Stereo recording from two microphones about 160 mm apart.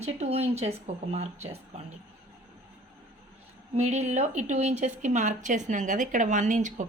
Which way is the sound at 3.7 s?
45° right (ahead or behind).